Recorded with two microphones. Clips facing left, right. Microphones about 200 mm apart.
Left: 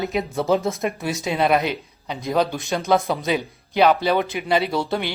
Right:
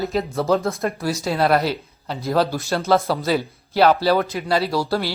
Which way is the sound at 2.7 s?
15° left (ahead or behind).